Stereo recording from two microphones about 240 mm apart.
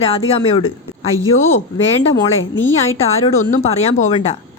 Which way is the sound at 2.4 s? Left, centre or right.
Left.